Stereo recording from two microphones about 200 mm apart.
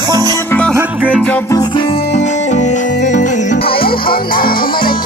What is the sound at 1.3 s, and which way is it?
Music, 5° left (ahead or behind).